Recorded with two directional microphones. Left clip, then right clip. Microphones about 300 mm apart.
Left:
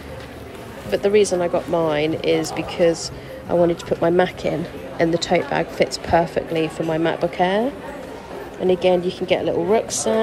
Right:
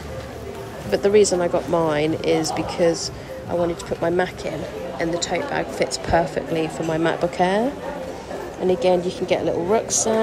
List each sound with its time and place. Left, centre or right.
0.8 s speech: centre
8.6 s speech: centre